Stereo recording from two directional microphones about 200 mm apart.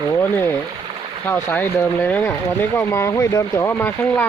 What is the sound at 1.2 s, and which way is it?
Speech, 10° left (ahead or behind).